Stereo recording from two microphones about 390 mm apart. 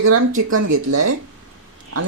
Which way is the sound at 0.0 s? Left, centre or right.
Right.